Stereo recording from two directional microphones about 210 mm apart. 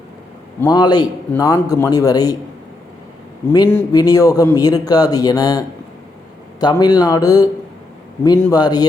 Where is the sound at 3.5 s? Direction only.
15° left (ahead or behind).